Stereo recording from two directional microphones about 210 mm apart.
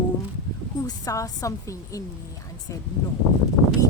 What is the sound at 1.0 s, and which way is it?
Speech, 15° left (ahead or behind).